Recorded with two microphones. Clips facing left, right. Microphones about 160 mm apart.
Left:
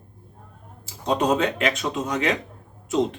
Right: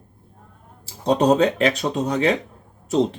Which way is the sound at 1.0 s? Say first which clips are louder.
Right 5 dB; 35° right (ahead or behind).